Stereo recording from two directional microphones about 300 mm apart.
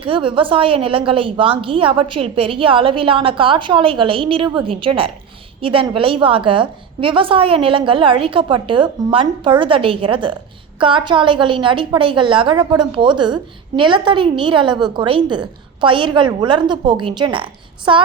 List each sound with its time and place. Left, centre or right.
0.0 s a woman's voice: centre